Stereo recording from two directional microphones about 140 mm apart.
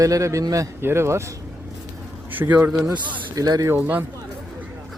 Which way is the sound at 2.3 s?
10° right (ahead or behind).